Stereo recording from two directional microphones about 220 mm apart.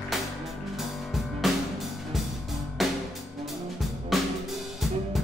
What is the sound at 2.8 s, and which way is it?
Music, centre (ahead or behind).